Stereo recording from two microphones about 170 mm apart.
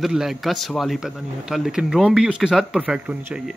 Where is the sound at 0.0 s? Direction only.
Centre (ahead or behind).